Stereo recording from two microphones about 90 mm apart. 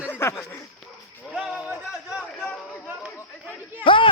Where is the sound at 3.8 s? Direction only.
70° left (ahead or behind).